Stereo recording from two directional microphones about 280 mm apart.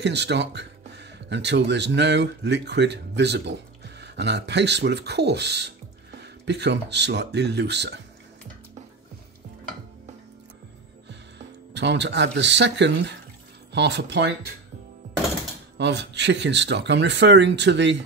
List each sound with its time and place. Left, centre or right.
0.0 s speech: right
11.1 s speech: right
15.8 s speech: right